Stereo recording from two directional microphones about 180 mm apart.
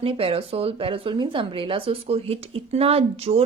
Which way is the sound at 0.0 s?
30° right (ahead or behind).